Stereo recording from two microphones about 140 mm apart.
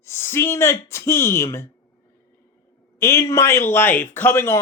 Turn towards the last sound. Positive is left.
turn(degrees=15)  # may be behind; listen again after turning